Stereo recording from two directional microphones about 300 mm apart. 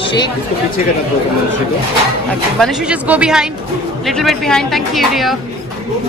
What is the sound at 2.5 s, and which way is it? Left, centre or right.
A woman's voice, centre.